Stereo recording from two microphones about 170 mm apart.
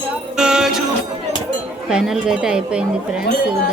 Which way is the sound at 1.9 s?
5° right (ahead or behind).